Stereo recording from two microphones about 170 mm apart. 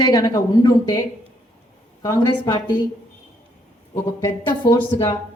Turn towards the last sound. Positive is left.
turn(degrees=20)  # may be behind; listen again after turning